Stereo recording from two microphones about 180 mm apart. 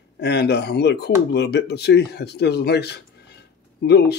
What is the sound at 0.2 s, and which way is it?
Speech, 70° left (ahead or behind).